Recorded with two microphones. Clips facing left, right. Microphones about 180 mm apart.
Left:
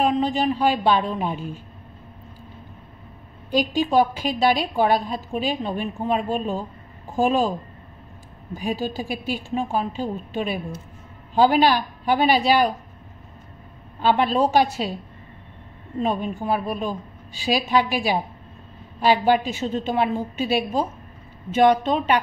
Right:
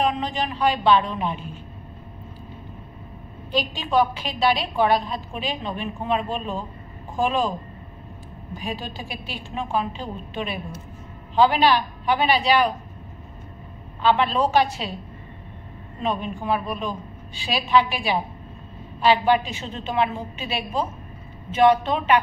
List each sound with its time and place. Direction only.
0.0 s a woman's voice: 40° left (ahead or behind)
3.5 s a woman's voice: 45° left (ahead or behind)
8.5 s a woman's voice: 45° left (ahead or behind)
14.0 s a woman's voice: 45° left (ahead or behind)
16.0 s a woman's voice: 45° left (ahead or behind)